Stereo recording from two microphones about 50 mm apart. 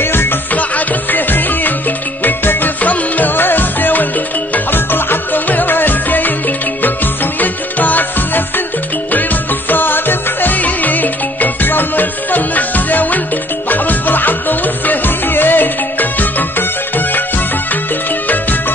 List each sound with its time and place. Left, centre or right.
0.0 s music: left
0.5 s music: left